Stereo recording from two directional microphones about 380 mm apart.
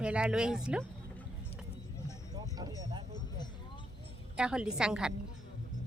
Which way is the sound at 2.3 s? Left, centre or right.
Centre.